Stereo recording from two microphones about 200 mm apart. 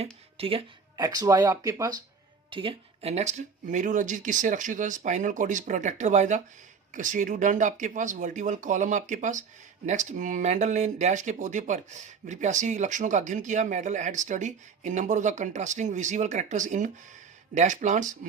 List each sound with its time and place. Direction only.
0.0 s speech: 30° right (ahead or behind)